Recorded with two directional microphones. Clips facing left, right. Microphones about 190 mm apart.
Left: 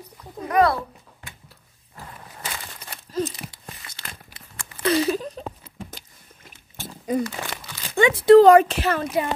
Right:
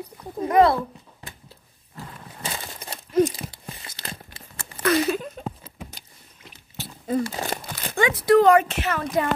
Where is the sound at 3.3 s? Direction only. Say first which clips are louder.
Right 2 dB; 30° right (ahead or behind).